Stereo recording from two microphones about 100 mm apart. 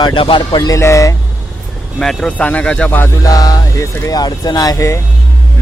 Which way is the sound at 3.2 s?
35° left (ahead or behind).